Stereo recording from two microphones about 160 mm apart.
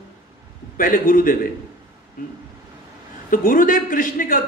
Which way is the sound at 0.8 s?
60° left (ahead or behind).